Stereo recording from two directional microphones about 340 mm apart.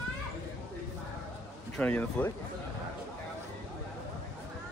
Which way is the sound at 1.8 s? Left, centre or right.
Centre.